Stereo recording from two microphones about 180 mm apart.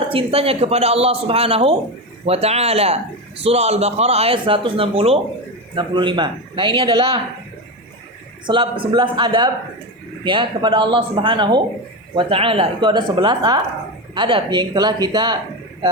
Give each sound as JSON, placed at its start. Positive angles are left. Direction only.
{"t": 0.1, "sound": "a man's voice", "side_deg": -30}
{"t": 8.4, "sound": "speech", "side_deg": -30}